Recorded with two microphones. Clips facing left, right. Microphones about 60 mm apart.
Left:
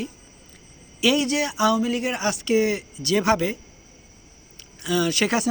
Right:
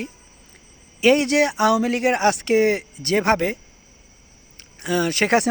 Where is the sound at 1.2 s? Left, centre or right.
Right.